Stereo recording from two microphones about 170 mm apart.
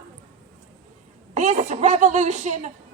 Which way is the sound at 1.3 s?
45° right (ahead or behind).